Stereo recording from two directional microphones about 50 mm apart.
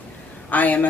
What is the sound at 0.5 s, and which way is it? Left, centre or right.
Speech, left.